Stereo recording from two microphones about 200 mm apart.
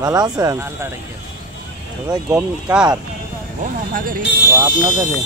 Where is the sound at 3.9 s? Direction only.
45° right (ahead or behind).